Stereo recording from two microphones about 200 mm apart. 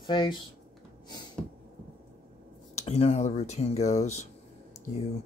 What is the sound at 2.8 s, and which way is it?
Speech, 30° left (ahead or behind).